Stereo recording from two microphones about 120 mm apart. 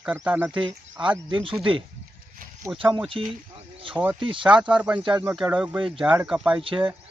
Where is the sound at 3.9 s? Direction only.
10° right (ahead or behind).